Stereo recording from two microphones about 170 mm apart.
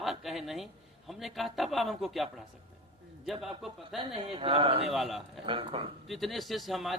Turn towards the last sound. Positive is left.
turn(degrees=0)  # may be behind; listen again after turning